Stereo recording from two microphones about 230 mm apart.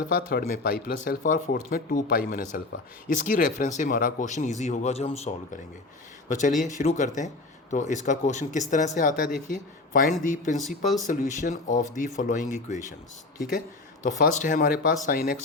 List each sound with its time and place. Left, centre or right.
0.0 s speech: left
14.0 s speech: left